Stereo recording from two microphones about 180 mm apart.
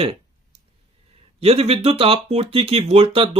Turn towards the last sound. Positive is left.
turn(degrees=-30)  # may be behind; listen again after turning